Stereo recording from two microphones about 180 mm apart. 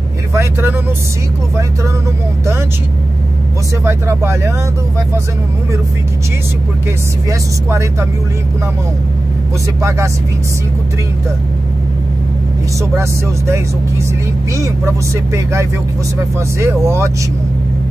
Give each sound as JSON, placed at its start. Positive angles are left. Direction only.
{"t": 0.3, "sound": "speech", "side_deg": -15}
{"t": 3.8, "sound": "speech", "side_deg": -15}
{"t": 7.2, "sound": "speech", "side_deg": -15}
{"t": 9.8, "sound": "speech", "side_deg": -15}
{"t": 12.9, "sound": "speech", "side_deg": -15}
{"t": 16.5, "sound": "speech", "side_deg": -15}